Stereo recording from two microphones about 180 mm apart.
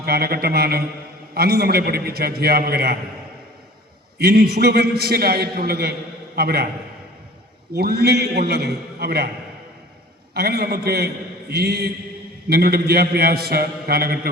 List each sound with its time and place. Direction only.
0.0 s a man's voice: 60° right (ahead or behind)
4.2 s a man's voice: 60° right (ahead or behind)
7.8 s a man's voice: 60° right (ahead or behind)
10.3 s a man's voice: 60° right (ahead or behind)